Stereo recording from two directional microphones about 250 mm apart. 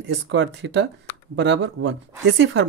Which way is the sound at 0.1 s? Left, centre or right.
Right.